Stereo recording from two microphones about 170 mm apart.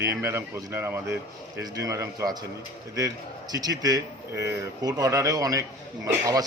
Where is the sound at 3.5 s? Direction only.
20° right (ahead or behind).